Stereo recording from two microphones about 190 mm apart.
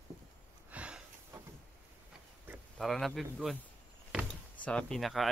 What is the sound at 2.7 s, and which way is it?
Speech, centre (ahead or behind).